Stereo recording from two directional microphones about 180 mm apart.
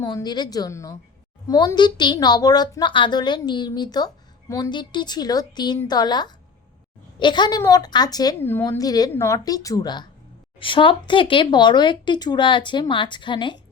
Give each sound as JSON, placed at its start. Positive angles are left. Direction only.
{"t": 0.0, "sound": "a woman's voice", "side_deg": 25}